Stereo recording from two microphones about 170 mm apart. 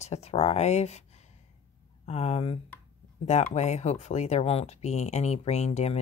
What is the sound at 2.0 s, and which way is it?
Speech, 40° left (ahead or behind).